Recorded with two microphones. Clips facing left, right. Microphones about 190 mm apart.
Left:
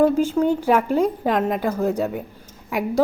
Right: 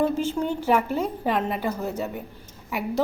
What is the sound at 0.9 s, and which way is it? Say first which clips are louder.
Speech: left 6 dB; 10° left (ahead or behind).